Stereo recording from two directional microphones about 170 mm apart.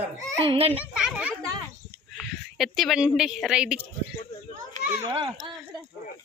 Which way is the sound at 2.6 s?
Centre (ahead or behind).